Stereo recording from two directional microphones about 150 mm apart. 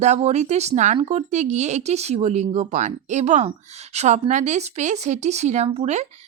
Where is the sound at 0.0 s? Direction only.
50° right (ahead or behind).